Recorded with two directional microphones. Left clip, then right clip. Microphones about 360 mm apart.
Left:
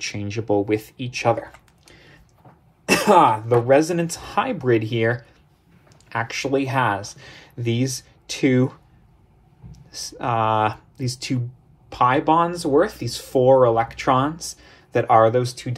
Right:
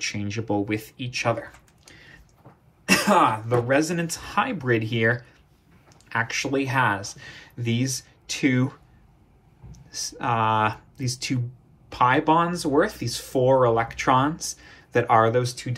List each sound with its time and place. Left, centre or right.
0.0 s speech: centre